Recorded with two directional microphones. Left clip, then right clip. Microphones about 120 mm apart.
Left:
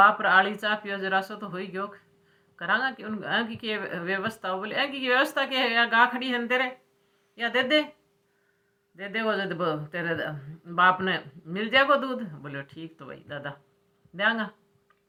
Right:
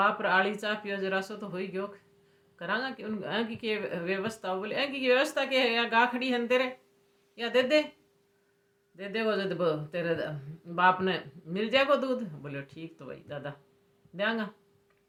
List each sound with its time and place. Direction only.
0.0 s speech: 25° right (ahead or behind)
9.0 s speech: 25° right (ahead or behind)